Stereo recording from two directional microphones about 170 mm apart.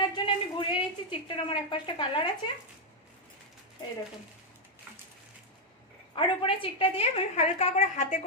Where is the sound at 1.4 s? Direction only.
30° left (ahead or behind).